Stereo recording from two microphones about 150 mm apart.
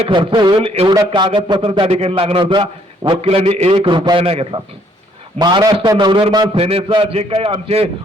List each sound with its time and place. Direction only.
0.0 s a man's voice: 35° right (ahead or behind)
0.9 s a man's voice: 30° right (ahead or behind)
5.4 s a man's voice: 30° right (ahead or behind)